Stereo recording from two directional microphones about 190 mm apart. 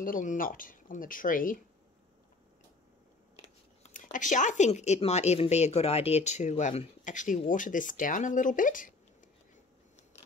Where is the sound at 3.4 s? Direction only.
40° left (ahead or behind).